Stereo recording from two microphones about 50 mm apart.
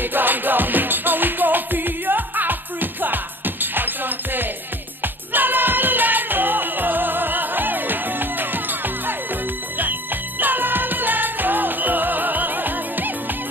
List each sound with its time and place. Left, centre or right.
0.0 s music: right
10.4 s music: right